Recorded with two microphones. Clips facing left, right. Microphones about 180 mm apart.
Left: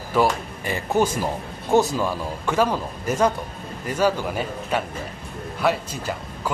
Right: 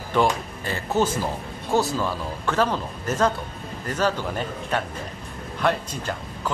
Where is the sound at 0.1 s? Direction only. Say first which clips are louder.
Left 1 dB; 10° left (ahead or behind).